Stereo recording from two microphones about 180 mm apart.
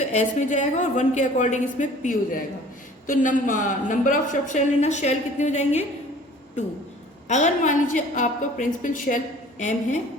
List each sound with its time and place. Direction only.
0.0 s a woman's voice: 40° left (ahead or behind)
7.3 s a woman's voice: 40° left (ahead or behind)